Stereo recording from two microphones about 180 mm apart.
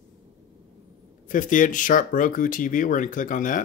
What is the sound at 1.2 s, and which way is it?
Speech, 45° left (ahead or behind).